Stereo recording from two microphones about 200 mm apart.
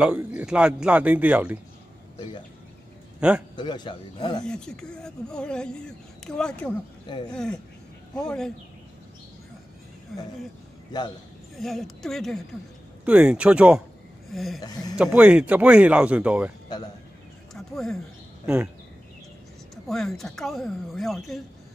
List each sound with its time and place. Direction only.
0.0 s speech: 5° right (ahead or behind)
3.2 s a man's voice: 5° right (ahead or behind)
3.5 s a man's voice: 20° left (ahead or behind)
4.5 s speech: 5° left (ahead or behind)
7.1 s a man's voice: 20° left (ahead or behind)
7.3 s speech: 5° left (ahead or behind)
10.9 s a man's voice: 20° left (ahead or behind)
11.5 s speech: centre (ahead or behind)
14.3 s a sound: centre (ahead or behind)
15.0 s speech: 5° right (ahead or behind)
16.6 s speech: 20° left (ahead or behind)
17.6 s speech: centre (ahead or behind)
19.7 s speech: centre (ahead or behind)